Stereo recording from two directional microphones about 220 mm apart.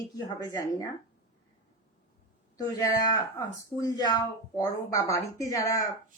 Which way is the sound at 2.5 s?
15° left (ahead or behind).